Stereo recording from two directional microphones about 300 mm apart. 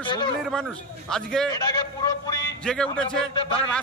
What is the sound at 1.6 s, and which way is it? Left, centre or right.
A man's voice, centre.